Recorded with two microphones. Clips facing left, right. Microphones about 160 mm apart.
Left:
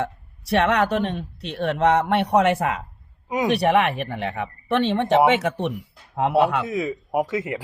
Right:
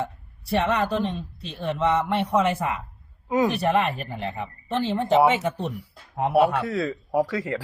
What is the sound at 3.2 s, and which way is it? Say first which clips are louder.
Speech: right 2 dB; 20° left (ahead or behind).